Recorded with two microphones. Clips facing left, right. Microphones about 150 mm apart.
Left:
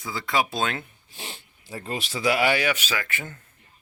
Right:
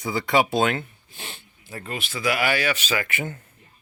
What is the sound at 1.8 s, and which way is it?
Speech, 35° left (ahead or behind).